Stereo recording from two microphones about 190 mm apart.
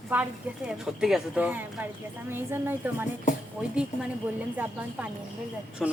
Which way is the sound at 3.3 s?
40° left (ahead or behind).